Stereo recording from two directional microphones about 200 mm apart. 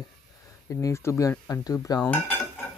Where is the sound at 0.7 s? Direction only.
15° left (ahead or behind).